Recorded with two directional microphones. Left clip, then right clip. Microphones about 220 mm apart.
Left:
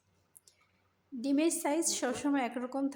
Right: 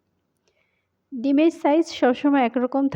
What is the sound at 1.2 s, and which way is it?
Speech, 35° right (ahead or behind).